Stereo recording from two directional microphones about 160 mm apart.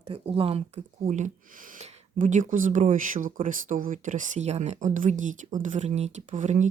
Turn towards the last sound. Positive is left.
turn(degrees=-50)  # may be behind; listen again after turning